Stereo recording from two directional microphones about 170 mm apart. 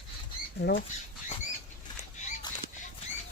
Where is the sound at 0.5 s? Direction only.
75° left (ahead or behind).